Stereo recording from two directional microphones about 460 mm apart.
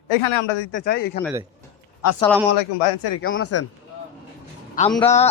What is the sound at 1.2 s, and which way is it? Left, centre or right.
A man's voice, centre.